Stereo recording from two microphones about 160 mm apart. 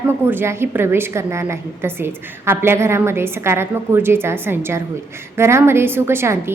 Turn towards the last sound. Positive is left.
turn(degrees=-15)  # may be behind; listen again after turning